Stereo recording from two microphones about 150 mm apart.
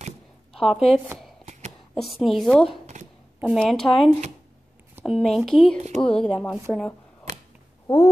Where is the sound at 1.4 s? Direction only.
55° right (ahead or behind).